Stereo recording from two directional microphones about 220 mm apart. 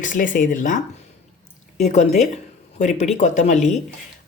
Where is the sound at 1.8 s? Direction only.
30° left (ahead or behind).